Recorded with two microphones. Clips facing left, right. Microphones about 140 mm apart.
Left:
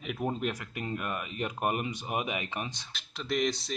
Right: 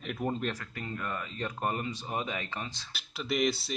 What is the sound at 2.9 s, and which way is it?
Speech, 5° right (ahead or behind).